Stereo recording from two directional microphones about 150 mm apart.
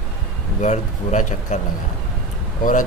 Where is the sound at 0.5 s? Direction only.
55° left (ahead or behind).